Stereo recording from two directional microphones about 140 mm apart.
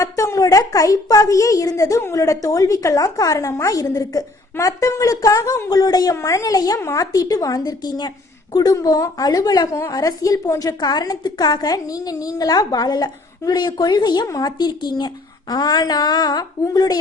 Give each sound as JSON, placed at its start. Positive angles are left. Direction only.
{"t": 0.0, "sound": "a woman's voice", "side_deg": 25}